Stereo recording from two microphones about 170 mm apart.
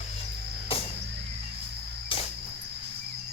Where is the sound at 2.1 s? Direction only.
30° left (ahead or behind).